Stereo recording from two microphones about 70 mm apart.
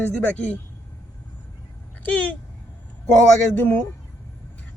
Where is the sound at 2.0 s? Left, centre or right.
Left.